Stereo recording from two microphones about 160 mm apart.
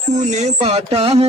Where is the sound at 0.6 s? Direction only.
40° right (ahead or behind).